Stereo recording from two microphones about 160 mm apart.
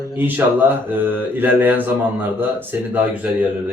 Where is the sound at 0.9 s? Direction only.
10° right (ahead or behind).